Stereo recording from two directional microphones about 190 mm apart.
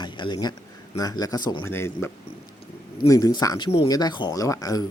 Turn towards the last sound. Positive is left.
turn(degrees=20)  # may be behind; listen again after turning